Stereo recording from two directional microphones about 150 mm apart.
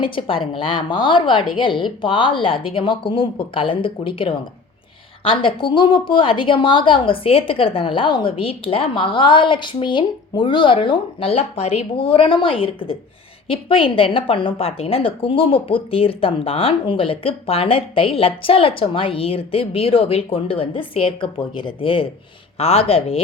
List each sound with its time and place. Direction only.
0.0 s a woman's voice: 35° left (ahead or behind)